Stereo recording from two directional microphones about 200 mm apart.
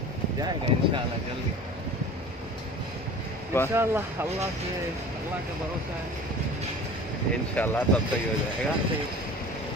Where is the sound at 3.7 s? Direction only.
10° right (ahead or behind).